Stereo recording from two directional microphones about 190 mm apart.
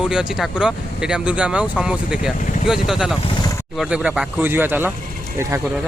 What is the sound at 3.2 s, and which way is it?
Vehicle, 25° left (ahead or behind).